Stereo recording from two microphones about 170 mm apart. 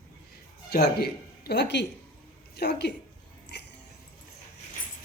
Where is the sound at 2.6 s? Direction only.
75° left (ahead or behind).